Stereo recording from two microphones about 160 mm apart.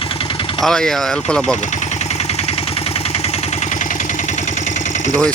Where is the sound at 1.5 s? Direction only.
45° left (ahead or behind).